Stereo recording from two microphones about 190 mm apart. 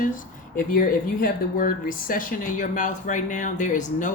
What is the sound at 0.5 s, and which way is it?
Speech, 45° left (ahead or behind).